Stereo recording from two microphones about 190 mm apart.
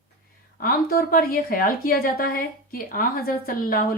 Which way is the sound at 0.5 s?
50° left (ahead or behind).